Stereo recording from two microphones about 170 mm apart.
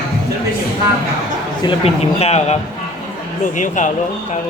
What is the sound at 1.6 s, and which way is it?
A man's voice, 35° left (ahead or behind).